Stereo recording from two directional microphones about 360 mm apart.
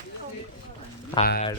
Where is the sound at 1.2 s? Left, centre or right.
Left.